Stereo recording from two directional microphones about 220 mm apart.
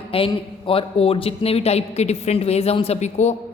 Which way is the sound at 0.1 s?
25° left (ahead or behind).